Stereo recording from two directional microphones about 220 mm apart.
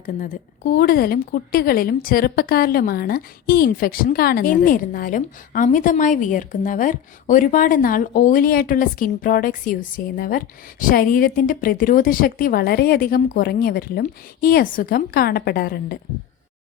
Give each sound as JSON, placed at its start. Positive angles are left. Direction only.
{"t": 0.0, "sound": "a woman's voice", "side_deg": 40}